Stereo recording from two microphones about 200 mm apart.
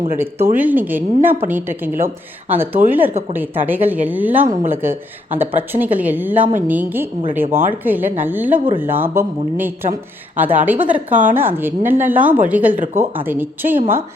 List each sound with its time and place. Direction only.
0.2 s a woman's voice: 10° right (ahead or behind)
3.1 s speech: 30° right (ahead or behind)
3.7 s a woman's voice: 10° right (ahead or behind)
11.1 s speech: 40° right (ahead or behind)
11.3 s a woman's voice: 10° right (ahead or behind)
12.7 s speech: 40° right (ahead or behind)
13.0 s a woman's voice: 10° right (ahead or behind)